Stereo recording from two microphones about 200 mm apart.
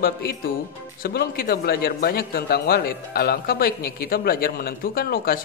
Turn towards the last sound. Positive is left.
turn(degrees=50)  # may be behind; listen again after turning